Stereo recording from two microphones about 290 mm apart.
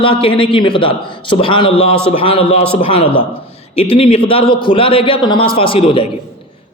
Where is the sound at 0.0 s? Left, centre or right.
Centre.